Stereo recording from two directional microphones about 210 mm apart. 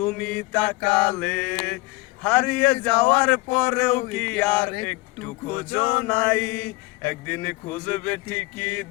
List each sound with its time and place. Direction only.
0.0 s a sound: 5° left (ahead or behind)
5.6 s music: 25° left (ahead or behind)
6.1 s mantra: 10° left (ahead or behind)